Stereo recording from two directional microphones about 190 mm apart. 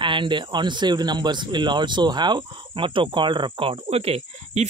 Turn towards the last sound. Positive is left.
turn(degrees=-35)  # may be behind; listen again after turning